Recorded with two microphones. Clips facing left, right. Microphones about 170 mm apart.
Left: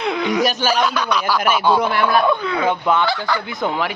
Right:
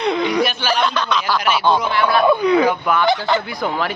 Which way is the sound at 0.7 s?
10° left (ahead or behind).